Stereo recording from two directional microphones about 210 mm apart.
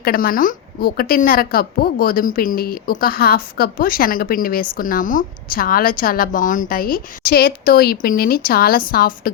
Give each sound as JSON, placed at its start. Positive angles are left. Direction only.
{"t": 0.0, "sound": "a woman's voice", "side_deg": 45}